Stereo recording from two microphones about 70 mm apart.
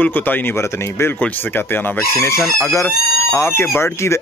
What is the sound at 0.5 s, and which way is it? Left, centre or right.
Speech, left.